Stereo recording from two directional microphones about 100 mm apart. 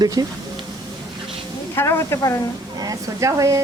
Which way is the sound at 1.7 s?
25° left (ahead or behind).